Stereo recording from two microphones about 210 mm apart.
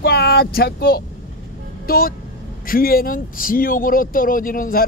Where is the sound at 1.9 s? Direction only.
45° left (ahead or behind).